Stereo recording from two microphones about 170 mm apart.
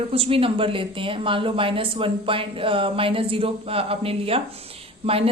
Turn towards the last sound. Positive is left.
turn(degrees=-35)  # may be behind; listen again after turning